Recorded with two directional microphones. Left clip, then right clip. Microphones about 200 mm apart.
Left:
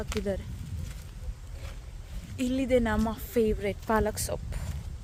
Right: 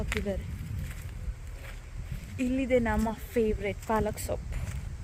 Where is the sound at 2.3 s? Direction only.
15° left (ahead or behind).